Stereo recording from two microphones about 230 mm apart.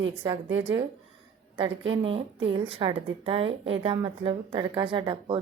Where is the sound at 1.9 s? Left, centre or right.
Right.